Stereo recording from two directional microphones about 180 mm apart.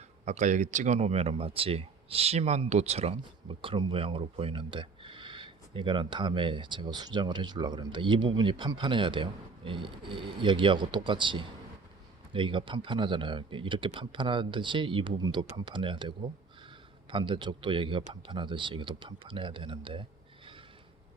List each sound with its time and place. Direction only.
0.3 s speech: 45° right (ahead or behind)